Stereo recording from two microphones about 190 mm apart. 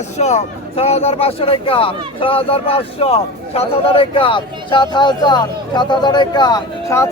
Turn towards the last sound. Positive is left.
turn(degrees=15)  # may be behind; listen again after turning